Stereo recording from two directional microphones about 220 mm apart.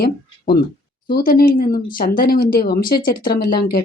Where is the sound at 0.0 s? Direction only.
45° left (ahead or behind).